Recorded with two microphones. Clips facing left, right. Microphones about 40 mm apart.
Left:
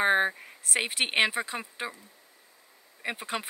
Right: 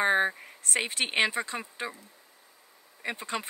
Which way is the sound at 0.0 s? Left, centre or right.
Centre.